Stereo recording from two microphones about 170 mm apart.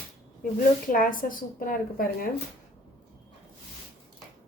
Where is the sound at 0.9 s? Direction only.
55° left (ahead or behind).